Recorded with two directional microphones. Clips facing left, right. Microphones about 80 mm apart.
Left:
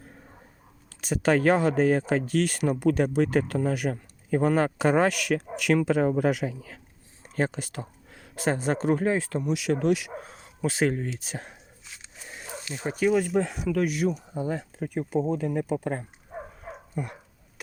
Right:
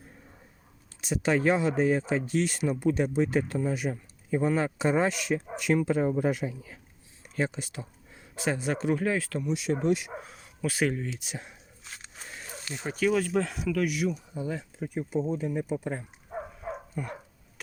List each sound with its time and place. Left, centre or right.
0.9 s speech: left
7.3 s a sound: left
8.4 s speech: left
9.5 s speech: left
10.2 s a sound: left
11.2 s speech: left
12.7 s speech: left
13.7 s speech: left
16.9 s dog: centre